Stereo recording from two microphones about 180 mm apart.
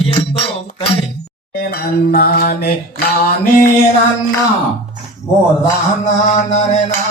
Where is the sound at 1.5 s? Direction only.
60° left (ahead or behind).